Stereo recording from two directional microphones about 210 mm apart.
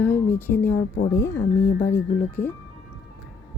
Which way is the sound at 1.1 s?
10° left (ahead or behind).